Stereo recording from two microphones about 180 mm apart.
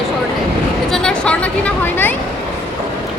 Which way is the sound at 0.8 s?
5° left (ahead or behind).